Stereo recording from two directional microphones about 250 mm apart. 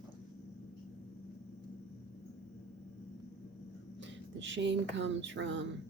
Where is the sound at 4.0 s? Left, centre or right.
Right.